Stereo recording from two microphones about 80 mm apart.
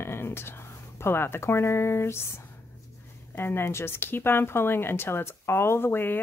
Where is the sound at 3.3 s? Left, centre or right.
Left.